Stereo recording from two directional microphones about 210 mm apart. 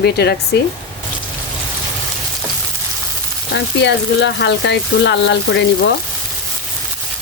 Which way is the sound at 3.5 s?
55° left (ahead or behind).